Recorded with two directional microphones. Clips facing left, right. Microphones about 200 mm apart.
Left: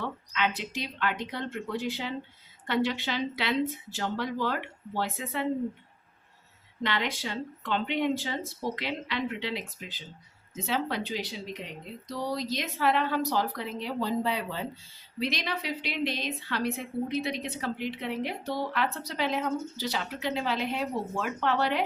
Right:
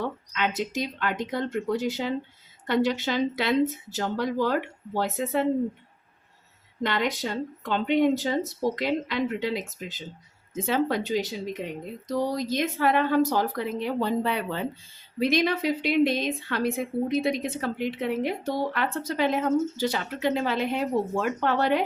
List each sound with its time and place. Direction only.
0.3 s a woman's voice: 45° right (ahead or behind)
6.8 s a woman's voice: 45° right (ahead or behind)